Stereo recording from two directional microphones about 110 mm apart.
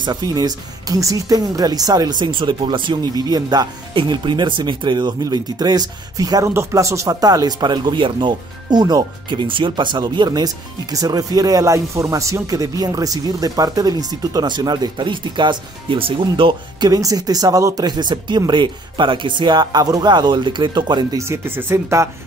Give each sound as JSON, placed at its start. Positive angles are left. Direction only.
{"t": 0.0, "sound": "speech", "side_deg": -35}
{"t": 16.9, "sound": "speech", "side_deg": -35}
{"t": 21.2, "sound": "speech", "side_deg": -20}